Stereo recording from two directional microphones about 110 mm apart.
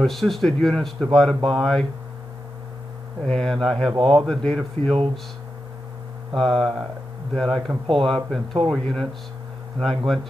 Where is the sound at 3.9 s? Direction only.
45° right (ahead or behind).